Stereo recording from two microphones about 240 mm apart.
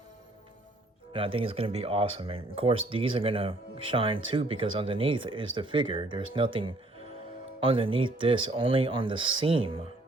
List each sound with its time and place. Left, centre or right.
1.1 s speech: right